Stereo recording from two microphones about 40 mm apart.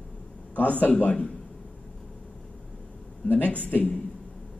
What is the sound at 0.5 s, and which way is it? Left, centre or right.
Speech, left.